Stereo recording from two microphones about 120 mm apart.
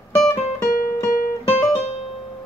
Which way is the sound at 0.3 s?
30° left (ahead or behind).